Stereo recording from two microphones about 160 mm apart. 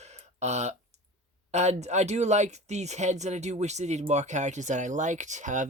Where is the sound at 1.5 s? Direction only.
45° right (ahead or behind).